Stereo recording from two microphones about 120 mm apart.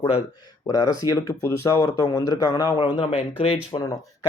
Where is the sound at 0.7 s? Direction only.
30° left (ahead or behind); by 3.8 s 50° left (ahead or behind).